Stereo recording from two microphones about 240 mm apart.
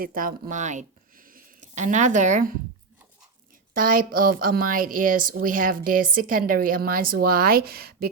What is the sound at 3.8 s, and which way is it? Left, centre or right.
A woman's voice, right.